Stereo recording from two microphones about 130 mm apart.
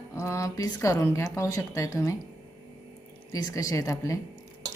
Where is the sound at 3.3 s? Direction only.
30° left (ahead or behind).